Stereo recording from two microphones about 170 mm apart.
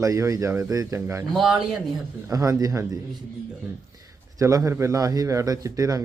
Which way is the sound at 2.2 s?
20° right (ahead or behind).